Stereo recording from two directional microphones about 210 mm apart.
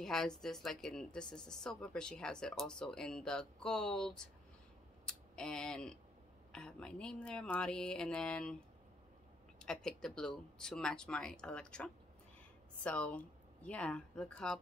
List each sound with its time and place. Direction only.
0.0 s speech: centre (ahead or behind)
5.0 s a sound: 5° left (ahead or behind)
6.5 s speech: 5° left (ahead or behind)
9.6 s speech: 5° left (ahead or behind)